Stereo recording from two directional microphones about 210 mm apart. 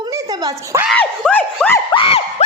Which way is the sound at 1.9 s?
25° left (ahead or behind).